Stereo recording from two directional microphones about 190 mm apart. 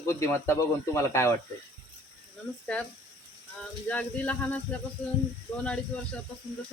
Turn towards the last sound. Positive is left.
turn(degrees=5)  # may be behind; listen again after turning